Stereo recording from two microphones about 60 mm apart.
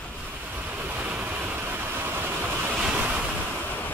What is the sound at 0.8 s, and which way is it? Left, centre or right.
Vehicle, right.